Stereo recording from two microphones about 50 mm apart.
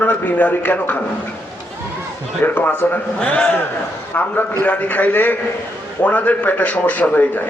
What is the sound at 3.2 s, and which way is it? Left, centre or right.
Speech, left.